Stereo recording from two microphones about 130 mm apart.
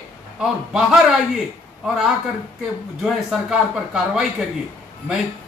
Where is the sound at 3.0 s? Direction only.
5° right (ahead or behind).